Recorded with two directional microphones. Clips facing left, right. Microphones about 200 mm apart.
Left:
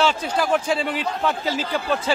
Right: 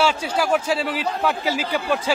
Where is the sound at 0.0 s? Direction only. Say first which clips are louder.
Even; 10° right (ahead or behind).